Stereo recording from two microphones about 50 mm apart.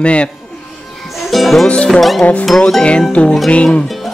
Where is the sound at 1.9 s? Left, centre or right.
Centre.